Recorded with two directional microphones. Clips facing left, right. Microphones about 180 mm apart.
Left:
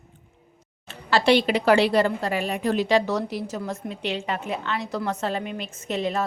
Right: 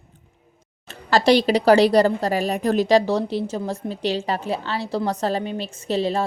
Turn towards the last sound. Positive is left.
turn(degrees=-30)  # may be behind; listen again after turning